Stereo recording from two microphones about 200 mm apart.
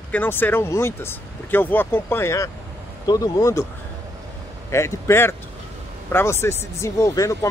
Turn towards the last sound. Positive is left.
turn(degrees=15)  # may be behind; listen again after turning